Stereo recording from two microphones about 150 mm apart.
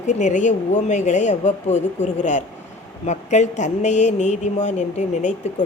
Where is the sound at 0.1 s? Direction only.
55° left (ahead or behind).